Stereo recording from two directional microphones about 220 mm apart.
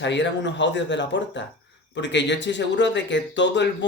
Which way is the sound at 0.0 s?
55° left (ahead or behind).